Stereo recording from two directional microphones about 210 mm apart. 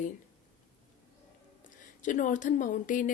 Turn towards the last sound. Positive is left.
turn(degrees=40)  # may be behind; listen again after turning